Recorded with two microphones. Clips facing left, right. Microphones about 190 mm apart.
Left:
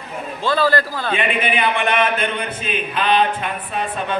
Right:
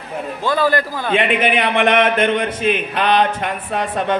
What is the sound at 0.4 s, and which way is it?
Speech, 15° right (ahead or behind).